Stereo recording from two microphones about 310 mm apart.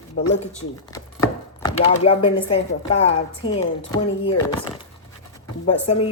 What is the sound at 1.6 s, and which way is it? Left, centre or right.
Speech, centre.